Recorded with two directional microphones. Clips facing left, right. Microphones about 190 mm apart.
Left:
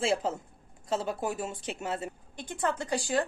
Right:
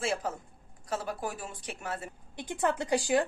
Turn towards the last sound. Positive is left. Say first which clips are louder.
# right 2 dB
turn(degrees=-15)  # may be behind; listen again after turning